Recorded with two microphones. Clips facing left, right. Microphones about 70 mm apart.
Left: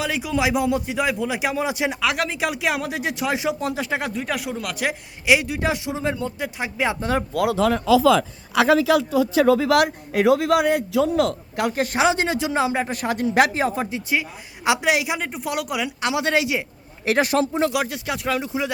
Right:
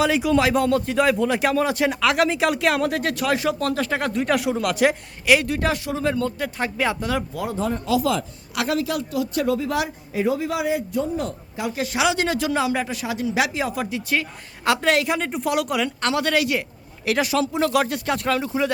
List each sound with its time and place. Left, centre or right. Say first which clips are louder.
0.0 s a woman's voice: right 4 dB; centre
2.0 s a woman's voice: right 6 dB; centre
4.1 s speech: right 5 dB; centre
5.2 s a woman's voice: right 1 dB; centre
7.0 s speech: left 2 dB; left
7.3 s speech: left 6 dB; left
9.6 s a man's voice: left 6 dB; left
11.6 s speech: left 2 dB; left
12.9 s speech: left 3 dB; left
14.1 s a woman's voice: even; centre
16.2 s speech: left 1 dB; left
17.1 s speech: left 2 dB; left
17.7 s a woman's voice: right 3 dB; centre